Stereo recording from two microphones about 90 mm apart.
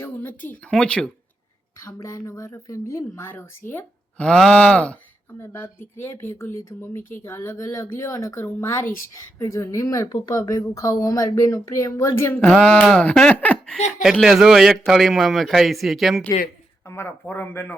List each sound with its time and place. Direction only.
0.0 s speech: 20° left (ahead or behind)
0.7 s speech: 10° left (ahead or behind)
2.0 s a woman's voice: 35° left (ahead or behind)
4.2 s speech: 10° left (ahead or behind)
5.4 s a woman's voice: 25° left (ahead or behind)
12.3 s speech: 15° left (ahead or behind)
13.3 s a sound: 15° left (ahead or behind)
14.0 s a man's voice: 5° right (ahead or behind)
16.8 s speech: 25° left (ahead or behind)